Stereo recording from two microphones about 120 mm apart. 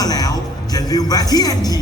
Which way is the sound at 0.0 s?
30° left (ahead or behind).